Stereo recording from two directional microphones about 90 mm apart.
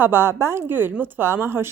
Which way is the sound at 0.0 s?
25° right (ahead or behind).